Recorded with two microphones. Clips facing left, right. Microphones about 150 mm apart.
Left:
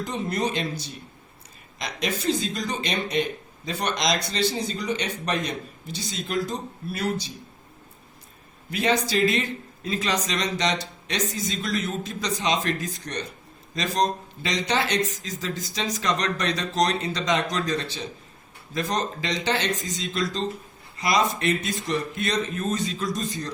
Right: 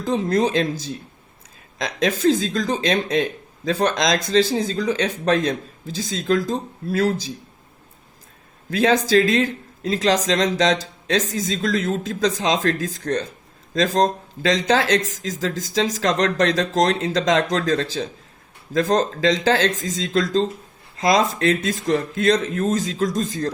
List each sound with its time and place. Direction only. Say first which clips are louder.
0.1 s speech: right 9 dB; 90° right
1.8 s speech: right 9 dB; 90° right
8.7 s speech: right 7 dB; 90° right